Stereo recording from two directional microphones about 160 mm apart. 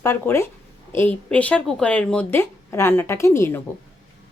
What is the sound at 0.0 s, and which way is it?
Speech, 20° left (ahead or behind).